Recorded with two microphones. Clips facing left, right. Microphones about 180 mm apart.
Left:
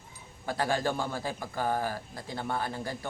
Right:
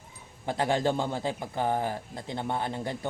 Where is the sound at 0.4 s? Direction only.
20° right (ahead or behind).